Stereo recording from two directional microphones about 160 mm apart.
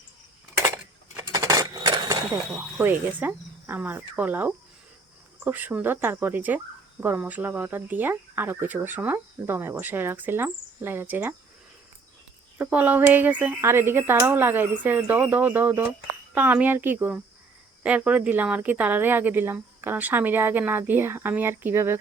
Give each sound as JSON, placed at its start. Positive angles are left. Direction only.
{"t": 1.1, "sound": "a sound", "side_deg": -20}
{"t": 2.5, "sound": "speech", "side_deg": 0}
{"t": 12.5, "sound": "speech", "side_deg": -10}